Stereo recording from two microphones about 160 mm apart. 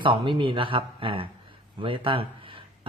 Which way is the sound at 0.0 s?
30° right (ahead or behind).